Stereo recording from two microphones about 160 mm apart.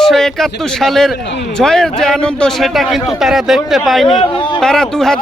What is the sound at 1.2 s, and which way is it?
Speech, 90° left.